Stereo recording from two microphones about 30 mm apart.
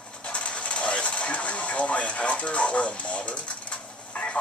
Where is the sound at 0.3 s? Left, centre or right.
Left.